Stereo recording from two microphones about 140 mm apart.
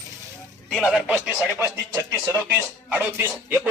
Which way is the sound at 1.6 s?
20° right (ahead or behind).